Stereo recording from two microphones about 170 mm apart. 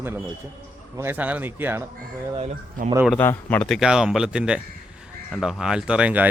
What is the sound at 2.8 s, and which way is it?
Speech, 55° right (ahead or behind).